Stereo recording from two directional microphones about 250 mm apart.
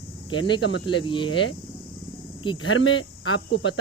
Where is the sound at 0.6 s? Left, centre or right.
Left.